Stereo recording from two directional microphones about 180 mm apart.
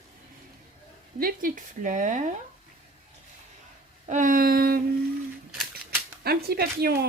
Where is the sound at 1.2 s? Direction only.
50° right (ahead or behind).